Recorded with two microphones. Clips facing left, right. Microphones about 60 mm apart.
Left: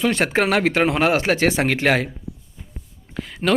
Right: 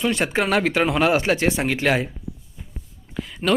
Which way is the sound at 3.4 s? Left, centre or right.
Left.